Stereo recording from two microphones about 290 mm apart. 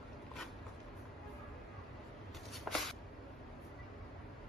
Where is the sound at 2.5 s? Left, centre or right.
Centre.